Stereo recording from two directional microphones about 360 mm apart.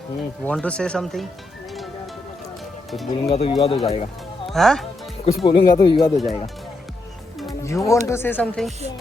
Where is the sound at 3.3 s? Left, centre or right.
Centre.